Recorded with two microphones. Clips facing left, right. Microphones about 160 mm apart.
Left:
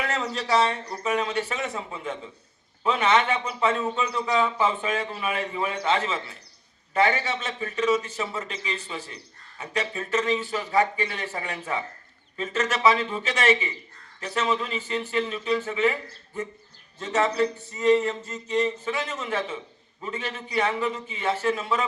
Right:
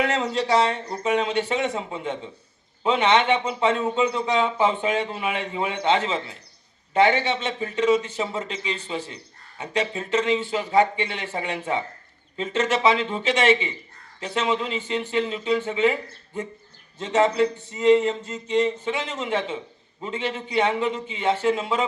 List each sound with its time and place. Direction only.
0.0 s a man's voice: 25° right (ahead or behind)